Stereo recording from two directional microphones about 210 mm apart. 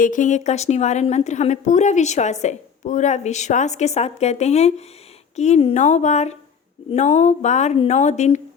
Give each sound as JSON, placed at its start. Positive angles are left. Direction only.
{"t": 0.0, "sound": "a woman's voice", "side_deg": 40}